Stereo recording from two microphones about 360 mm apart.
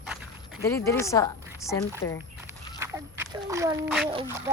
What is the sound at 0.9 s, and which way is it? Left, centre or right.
Speech, centre.